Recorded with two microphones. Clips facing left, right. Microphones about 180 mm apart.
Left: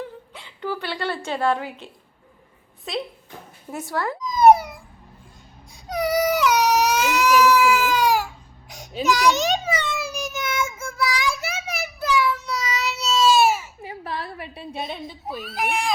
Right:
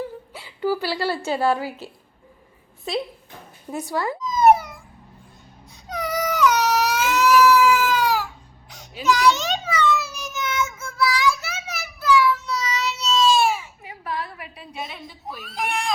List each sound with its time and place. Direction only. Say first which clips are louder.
0.3 s a woman's voice: right 6 dB; 5° right (ahead or behind)
4.2 s a sound: left 2 dB; 15° left (ahead or behind)
5.9 s baby cry: left 5 dB; 10° left (ahead or behind)
9.0 s child singing: even; 10° left (ahead or behind)
13.6 s a sound: left 4 dB; 30° left (ahead or behind)
15.4 s speech: left 1 dB; 5° left (ahead or behind)